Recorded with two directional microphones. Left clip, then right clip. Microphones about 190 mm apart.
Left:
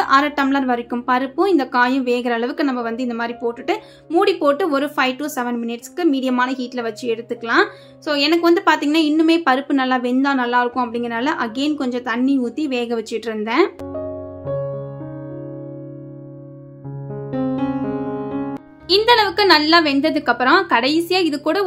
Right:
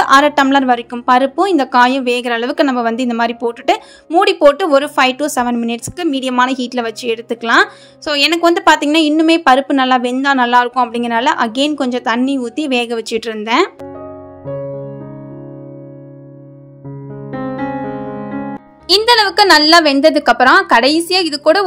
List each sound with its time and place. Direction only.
0.0 s speech: 45° right (ahead or behind)
17.3 s music: centre (ahead or behind)
18.9 s a woman's voice: 40° right (ahead or behind)